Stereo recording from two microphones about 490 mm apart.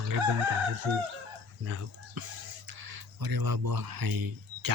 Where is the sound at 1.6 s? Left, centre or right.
Right.